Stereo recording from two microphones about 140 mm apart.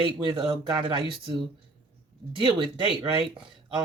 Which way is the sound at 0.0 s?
35° right (ahead or behind).